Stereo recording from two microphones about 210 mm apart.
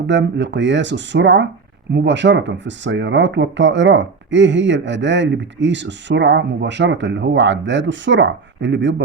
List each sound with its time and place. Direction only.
0.1 s speech: 60° right (ahead or behind)